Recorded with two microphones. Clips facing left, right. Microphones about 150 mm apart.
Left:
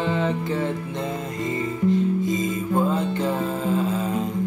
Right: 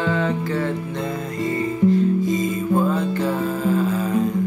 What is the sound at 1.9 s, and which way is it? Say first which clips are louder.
Music: right 3 dB; 20° left (ahead or behind).